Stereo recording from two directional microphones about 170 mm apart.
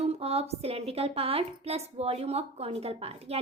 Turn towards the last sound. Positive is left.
turn(degrees=-35)  # may be behind; listen again after turning